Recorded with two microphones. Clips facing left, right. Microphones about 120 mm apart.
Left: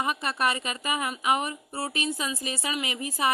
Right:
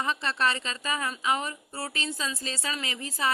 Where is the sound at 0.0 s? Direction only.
15° left (ahead or behind).